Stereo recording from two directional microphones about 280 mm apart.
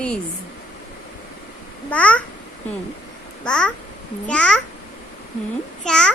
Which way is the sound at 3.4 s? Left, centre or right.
Centre.